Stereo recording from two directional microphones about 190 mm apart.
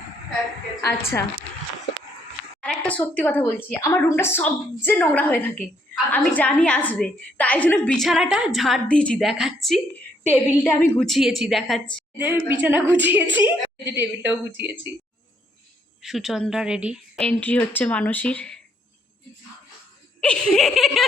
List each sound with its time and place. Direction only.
0.8 s a woman's voice: 15° left (ahead or behind)
2.6 s a woman's voice: 5° left (ahead or behind); by 14.9 s 10° right (ahead or behind)
16.0 s a woman's voice: centre (ahead or behind)
20.2 s a woman's voice: 5° left (ahead or behind)